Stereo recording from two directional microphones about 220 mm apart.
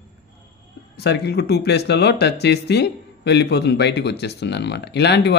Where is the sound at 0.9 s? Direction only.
50° left (ahead or behind).